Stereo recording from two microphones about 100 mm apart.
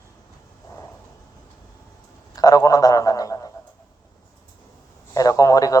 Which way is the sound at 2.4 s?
35° left (ahead or behind).